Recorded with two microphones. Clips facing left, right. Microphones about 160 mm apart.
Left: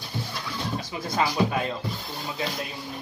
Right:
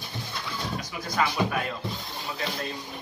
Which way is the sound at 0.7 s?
25° left (ahead or behind).